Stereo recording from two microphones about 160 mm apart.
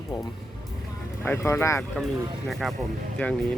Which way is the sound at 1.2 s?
15° left (ahead or behind).